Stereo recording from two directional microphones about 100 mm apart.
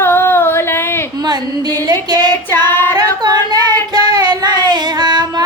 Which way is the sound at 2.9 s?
45° right (ahead or behind).